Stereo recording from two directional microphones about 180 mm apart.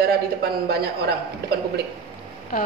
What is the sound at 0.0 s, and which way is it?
Speech, 60° right (ahead or behind).